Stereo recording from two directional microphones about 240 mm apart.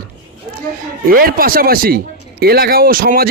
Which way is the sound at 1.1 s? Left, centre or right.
Right.